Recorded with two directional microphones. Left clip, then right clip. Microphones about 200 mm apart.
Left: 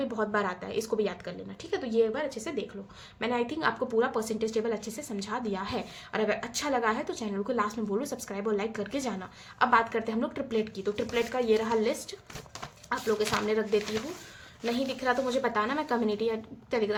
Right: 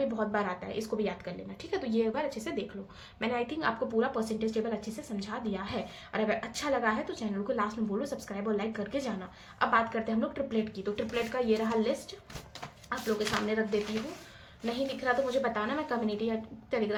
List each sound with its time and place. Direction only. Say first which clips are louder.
0.2 s a woman's voice: left 2 dB; 30° left (ahead or behind)